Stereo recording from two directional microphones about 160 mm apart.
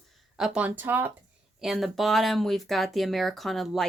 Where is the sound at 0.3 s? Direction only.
5° right (ahead or behind).